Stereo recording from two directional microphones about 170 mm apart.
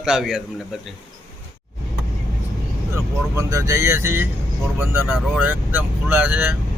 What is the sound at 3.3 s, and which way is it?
Speech, 20° right (ahead or behind).